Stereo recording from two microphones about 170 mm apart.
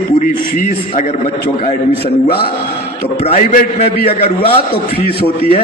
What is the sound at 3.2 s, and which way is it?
Speech, 45° left (ahead or behind).